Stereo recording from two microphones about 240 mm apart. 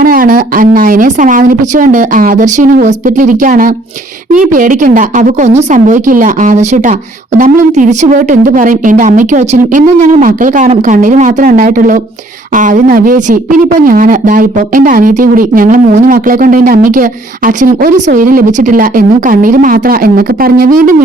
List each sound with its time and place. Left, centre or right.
0.0 s speech: right